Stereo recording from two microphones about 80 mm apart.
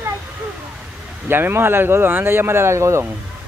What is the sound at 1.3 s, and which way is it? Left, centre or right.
Speech, right.